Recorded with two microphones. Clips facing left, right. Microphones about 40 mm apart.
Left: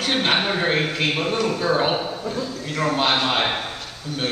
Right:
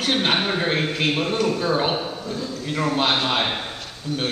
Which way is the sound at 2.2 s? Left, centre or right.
Centre.